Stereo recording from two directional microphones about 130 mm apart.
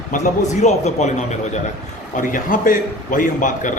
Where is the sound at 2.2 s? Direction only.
90° left.